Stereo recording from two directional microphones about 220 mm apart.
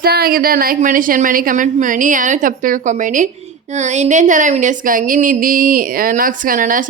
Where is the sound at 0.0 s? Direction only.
45° right (ahead or behind).